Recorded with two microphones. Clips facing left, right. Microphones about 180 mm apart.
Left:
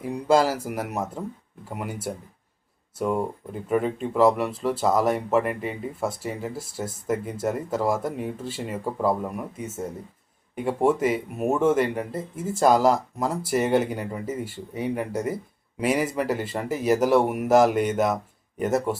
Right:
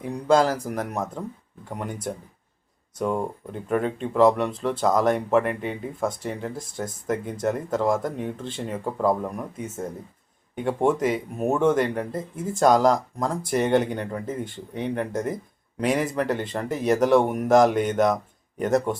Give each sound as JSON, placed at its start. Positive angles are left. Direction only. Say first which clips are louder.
{"t": 0.0, "sound": "speech", "louder": "right 1 dB", "side_deg": 5}